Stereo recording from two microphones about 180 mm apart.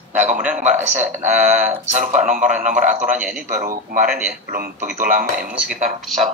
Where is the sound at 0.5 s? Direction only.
40° right (ahead or behind).